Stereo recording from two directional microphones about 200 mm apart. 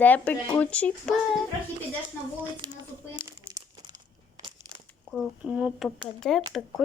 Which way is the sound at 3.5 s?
20° right (ahead or behind).